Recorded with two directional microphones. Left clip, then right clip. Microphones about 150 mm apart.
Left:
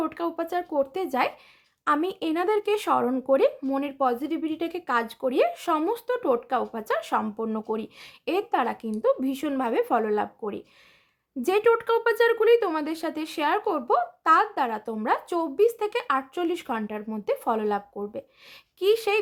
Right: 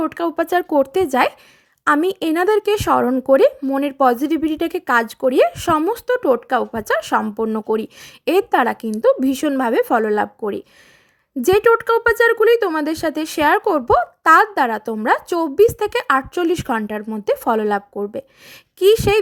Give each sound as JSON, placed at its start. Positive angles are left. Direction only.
{"t": 0.0, "sound": "a woman's voice", "side_deg": -40}